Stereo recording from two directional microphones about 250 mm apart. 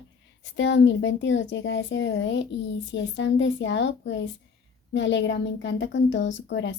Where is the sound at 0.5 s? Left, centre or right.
Left.